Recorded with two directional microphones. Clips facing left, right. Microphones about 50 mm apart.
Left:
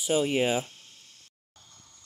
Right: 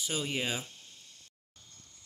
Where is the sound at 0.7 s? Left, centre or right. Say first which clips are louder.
Left 1 dB; left.